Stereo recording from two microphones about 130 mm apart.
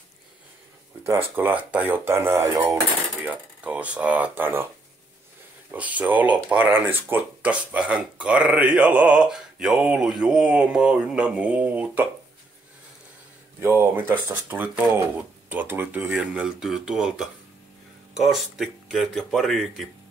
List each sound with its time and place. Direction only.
1.0 s speech: 15° right (ahead or behind)
5.7 s speech: 10° right (ahead or behind)
13.6 s speech: 15° right (ahead or behind); by 19.9 s centre (ahead or behind)